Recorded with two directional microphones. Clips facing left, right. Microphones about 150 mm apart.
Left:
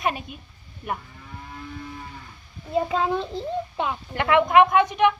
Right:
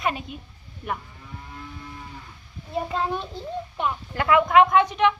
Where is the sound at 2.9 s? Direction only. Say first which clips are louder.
Left 3 dB; 90° left.